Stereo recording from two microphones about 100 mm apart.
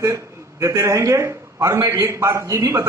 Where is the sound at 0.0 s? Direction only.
30° right (ahead or behind).